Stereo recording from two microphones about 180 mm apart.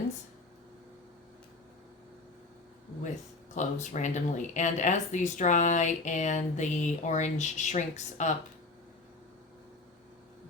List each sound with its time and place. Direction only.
3.5 s speech: 40° left (ahead or behind)